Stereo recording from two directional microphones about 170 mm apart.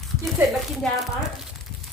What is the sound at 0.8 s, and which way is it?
Speech, centre (ahead or behind).